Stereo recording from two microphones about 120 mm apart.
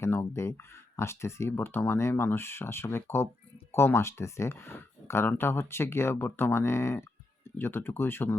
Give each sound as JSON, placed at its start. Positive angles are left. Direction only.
{"t": 0.0, "sound": "speech", "side_deg": 20}